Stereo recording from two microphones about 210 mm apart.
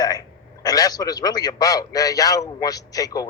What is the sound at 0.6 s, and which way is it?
A man's voice, 15° left (ahead or behind).